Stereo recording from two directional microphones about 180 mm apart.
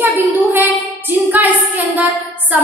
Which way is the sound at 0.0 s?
10° right (ahead or behind).